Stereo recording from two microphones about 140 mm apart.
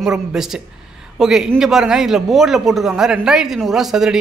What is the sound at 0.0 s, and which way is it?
A man's voice, 5° right (ahead or behind).